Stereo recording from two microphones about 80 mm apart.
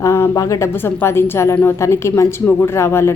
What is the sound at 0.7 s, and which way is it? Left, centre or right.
A woman's voice, left.